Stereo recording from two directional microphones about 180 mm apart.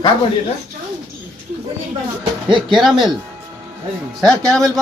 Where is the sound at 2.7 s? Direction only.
Centre (ahead or behind).